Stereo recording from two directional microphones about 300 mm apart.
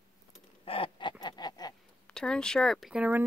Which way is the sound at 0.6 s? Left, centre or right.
Centre.